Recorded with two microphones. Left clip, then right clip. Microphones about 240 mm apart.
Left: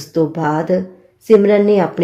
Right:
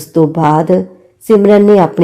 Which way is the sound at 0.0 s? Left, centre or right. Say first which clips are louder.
Right 6 dB; right.